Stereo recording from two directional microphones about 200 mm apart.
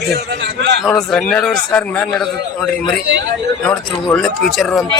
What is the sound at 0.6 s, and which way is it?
Speech, 60° right (ahead or behind).